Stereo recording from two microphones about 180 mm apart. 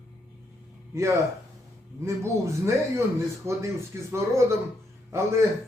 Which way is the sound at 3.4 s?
15° right (ahead or behind).